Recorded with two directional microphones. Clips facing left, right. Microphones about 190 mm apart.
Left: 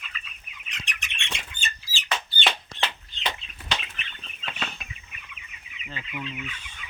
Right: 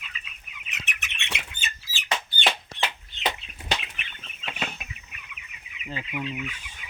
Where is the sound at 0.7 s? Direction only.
5° right (ahead or behind).